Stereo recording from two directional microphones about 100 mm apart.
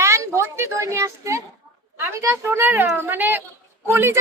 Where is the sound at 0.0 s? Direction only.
30° right (ahead or behind).